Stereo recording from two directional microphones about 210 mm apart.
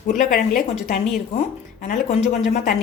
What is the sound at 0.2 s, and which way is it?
Speech, 40° left (ahead or behind).